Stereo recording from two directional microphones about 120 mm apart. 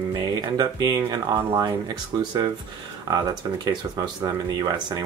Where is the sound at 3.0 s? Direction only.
35° right (ahead or behind).